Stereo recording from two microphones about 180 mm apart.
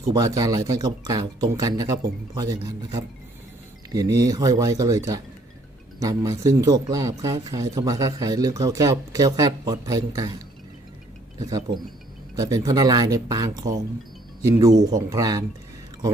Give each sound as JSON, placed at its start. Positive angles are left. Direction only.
{"t": 0.1, "sound": "speech", "side_deg": -20}
{"t": 4.2, "sound": "speech", "side_deg": -20}